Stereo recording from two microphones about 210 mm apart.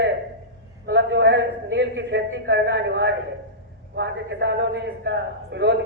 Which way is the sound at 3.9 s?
55° right (ahead or behind).